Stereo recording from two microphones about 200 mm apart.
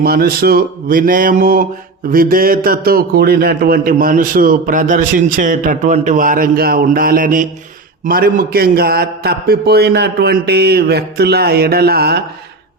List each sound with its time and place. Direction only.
0.0 s a man's voice: 50° right (ahead or behind)